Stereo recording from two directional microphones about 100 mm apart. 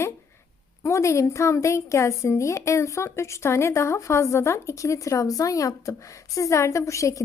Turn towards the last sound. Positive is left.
turn(degrees=30)  # may be behind; listen again after turning